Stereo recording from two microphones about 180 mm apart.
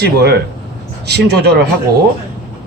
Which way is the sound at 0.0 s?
65° right (ahead or behind).